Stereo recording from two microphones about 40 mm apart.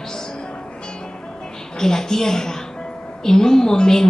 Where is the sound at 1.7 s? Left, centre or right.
Centre.